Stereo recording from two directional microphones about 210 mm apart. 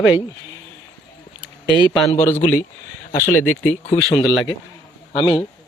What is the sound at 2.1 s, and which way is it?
Speech, 35° left (ahead or behind).